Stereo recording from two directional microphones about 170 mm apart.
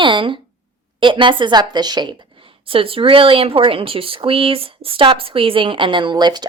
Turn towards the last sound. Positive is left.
turn(degrees=-25)  # may be behind; listen again after turning